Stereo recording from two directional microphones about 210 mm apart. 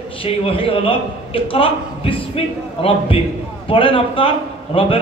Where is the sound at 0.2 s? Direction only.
25° left (ahead or behind).